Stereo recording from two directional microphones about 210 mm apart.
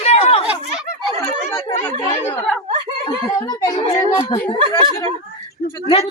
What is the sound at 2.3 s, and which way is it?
Speech, 5° left (ahead or behind).